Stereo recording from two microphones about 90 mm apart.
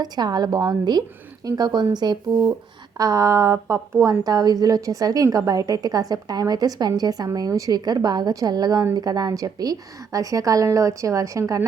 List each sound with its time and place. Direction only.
0.0 s a woman's voice: 50° right (ahead or behind)
3.0 s a woman's voice: 40° right (ahead or behind)